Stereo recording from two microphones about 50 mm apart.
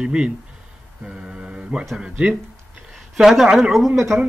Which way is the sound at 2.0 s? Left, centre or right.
Right.